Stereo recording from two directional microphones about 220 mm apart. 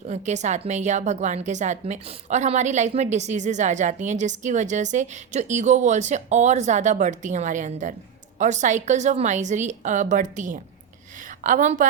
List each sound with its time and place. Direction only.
0.1 s a woman's voice: 30° right (ahead or behind)